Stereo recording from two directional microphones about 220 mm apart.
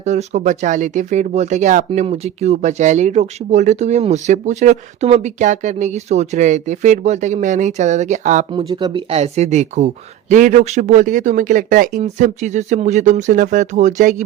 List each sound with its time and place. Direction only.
0.0 s speech: 30° right (ahead or behind)
8.5 s speech: 20° right (ahead or behind)